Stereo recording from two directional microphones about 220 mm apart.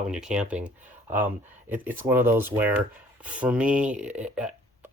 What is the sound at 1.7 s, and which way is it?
Speech, 10° right (ahead or behind).